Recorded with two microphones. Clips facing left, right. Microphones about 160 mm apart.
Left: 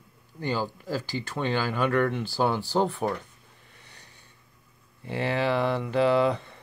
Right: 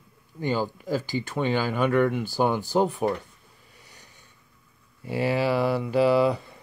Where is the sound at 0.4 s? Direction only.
15° right (ahead or behind).